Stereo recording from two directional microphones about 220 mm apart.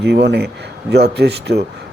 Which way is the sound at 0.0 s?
50° right (ahead or behind).